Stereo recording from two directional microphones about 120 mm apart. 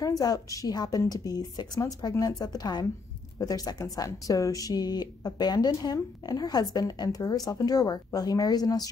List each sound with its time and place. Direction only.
0.0 s speech: 30° left (ahead or behind)